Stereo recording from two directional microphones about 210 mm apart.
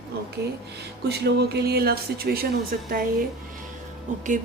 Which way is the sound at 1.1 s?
50° right (ahead or behind).